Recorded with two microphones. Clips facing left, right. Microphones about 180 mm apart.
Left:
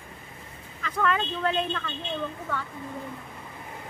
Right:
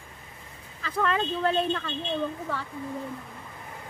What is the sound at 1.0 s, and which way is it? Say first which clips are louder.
Speech: even; 30° right (ahead or behind).